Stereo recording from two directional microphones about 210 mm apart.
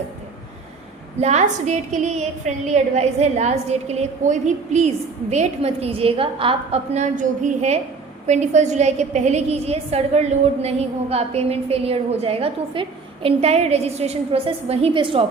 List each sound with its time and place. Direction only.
1.2 s a woman's voice: 35° right (ahead or behind)